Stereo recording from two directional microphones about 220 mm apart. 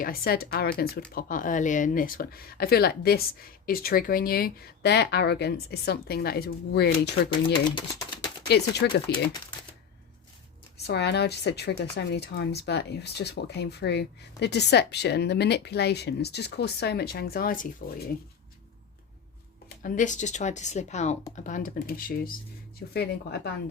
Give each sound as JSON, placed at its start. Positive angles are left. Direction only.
{"t": 0.0, "sound": "speech", "side_deg": 45}
{"t": 7.8, "sound": "a sound", "side_deg": 20}
{"t": 8.4, "sound": "speech", "side_deg": 50}
{"t": 10.8, "sound": "speech", "side_deg": 50}
{"t": 19.6, "sound": "speech", "side_deg": 35}